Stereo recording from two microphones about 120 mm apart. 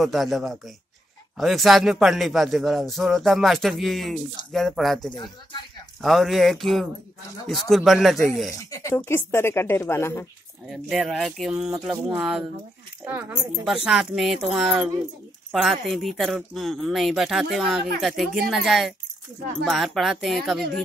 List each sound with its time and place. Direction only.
0.0 s speech: centre (ahead or behind)
5.1 s speech: 40° left (ahead or behind)
5.9 s speech: centre (ahead or behind)
8.5 s speech: 25° left (ahead or behind)
10.7 s speech: centre (ahead or behind)